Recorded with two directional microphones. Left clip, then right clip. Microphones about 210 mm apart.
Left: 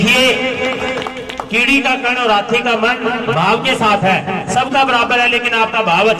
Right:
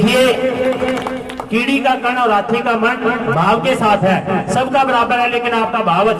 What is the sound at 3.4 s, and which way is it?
Speech, 45° right (ahead or behind).